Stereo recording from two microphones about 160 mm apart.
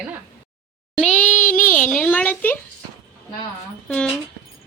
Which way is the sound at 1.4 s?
55° left (ahead or behind).